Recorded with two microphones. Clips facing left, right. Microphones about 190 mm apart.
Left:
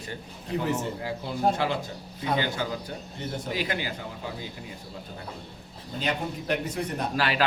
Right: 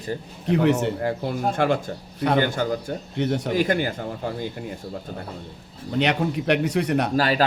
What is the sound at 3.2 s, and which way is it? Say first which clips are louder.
Speech: right 10 dB; 70° right (ahead or behind).